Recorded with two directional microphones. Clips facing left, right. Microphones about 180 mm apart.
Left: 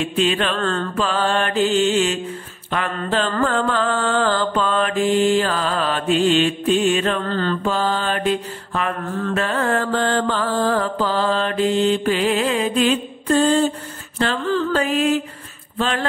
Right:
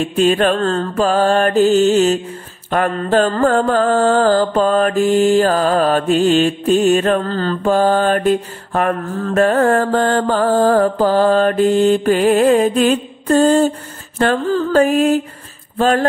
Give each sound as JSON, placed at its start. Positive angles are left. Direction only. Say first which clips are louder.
{"t": 0.0, "sound": "mantra", "louder": "right 6 dB", "side_deg": -45}